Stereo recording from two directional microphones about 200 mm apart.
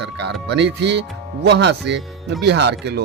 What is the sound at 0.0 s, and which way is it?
Speech, 60° right (ahead or behind).